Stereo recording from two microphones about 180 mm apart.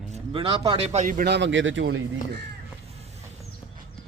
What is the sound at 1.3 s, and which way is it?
Speech, 85° right.